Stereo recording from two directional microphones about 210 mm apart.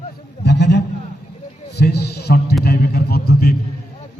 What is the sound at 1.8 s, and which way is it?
A man's voice, 50° left (ahead or behind).